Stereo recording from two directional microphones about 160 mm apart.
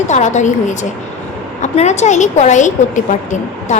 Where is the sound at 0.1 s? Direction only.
50° left (ahead or behind).